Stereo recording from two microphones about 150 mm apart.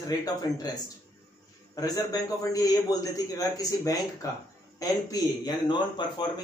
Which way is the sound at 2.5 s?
25° left (ahead or behind).